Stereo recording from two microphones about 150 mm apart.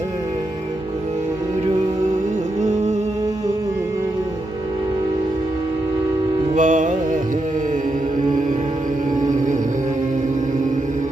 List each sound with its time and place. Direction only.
6.6 s music: 55° right (ahead or behind)